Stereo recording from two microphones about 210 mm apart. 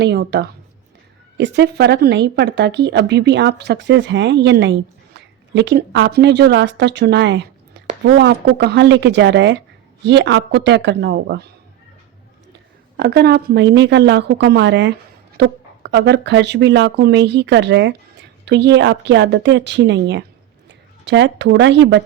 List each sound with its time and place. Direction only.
0.0 s speech: 55° right (ahead or behind)
13.0 s speech: 50° right (ahead or behind)